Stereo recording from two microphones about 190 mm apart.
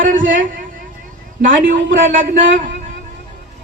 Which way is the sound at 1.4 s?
45° right (ahead or behind).